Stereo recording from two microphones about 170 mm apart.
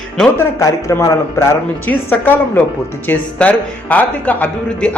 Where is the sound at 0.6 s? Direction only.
20° left (ahead or behind).